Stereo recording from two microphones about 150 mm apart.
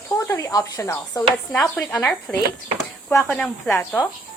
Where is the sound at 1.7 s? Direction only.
10° left (ahead or behind).